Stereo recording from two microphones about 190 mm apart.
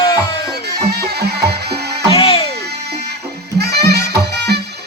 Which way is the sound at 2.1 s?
30° left (ahead or behind).